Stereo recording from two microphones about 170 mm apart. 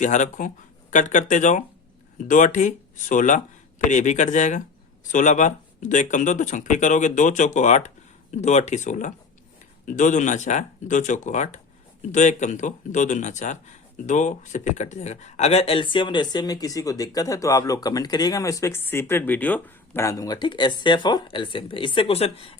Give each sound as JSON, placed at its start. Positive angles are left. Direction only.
{"t": 0.0, "sound": "speech", "side_deg": 45}